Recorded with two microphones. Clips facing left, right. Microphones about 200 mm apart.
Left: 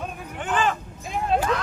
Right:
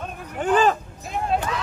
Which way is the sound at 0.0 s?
Centre (ahead or behind).